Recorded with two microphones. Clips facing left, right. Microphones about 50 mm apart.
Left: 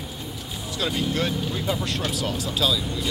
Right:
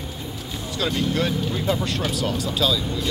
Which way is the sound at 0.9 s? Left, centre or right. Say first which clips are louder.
Right 2 dB; centre.